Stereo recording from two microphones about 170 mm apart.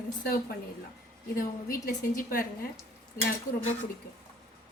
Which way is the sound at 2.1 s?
60° left (ahead or behind).